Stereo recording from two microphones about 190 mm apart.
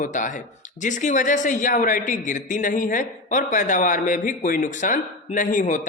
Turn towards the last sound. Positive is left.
turn(degrees=45)  # may be behind; listen again after turning